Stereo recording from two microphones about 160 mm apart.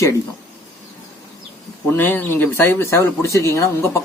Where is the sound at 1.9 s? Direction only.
10° left (ahead or behind).